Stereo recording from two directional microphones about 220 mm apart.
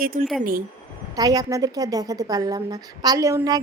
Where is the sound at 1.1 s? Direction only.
15° right (ahead or behind).